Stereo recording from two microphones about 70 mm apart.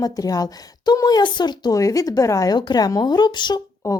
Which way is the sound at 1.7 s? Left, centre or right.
Left.